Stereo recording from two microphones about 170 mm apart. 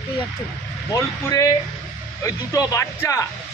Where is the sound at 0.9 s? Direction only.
20° left (ahead or behind).